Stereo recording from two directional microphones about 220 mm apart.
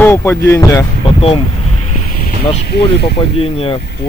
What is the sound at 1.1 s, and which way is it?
Speech, 25° left (ahead or behind).